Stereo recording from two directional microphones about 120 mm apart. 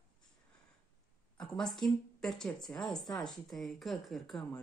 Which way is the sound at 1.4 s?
5° left (ahead or behind).